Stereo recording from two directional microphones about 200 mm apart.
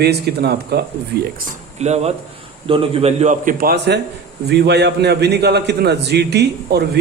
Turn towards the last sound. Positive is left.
turn(degrees=-55)  # may be behind; listen again after turning